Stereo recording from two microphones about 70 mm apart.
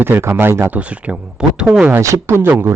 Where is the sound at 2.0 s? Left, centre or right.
Right.